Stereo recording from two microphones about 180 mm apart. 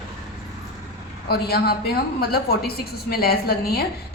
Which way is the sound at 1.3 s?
60° left (ahead or behind).